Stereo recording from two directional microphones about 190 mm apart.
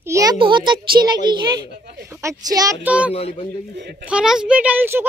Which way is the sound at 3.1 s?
30° left (ahead or behind).